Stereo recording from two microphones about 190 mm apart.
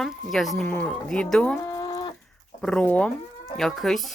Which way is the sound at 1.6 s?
20° left (ahead or behind).